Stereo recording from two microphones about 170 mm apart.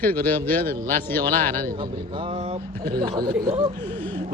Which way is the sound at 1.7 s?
30° right (ahead or behind).